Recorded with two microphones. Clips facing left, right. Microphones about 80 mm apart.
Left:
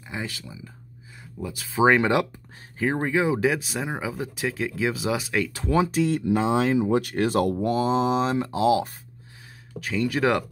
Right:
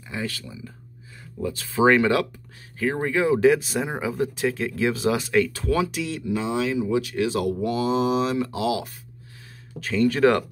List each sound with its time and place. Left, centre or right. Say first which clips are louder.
0.1 s speech: right 2 dB; centre
3.3 s speech: right 6 dB; centre
5.5 s speech: left 1 dB; left
7.6 s speech: even; left
9.8 s speech: right 5 dB; centre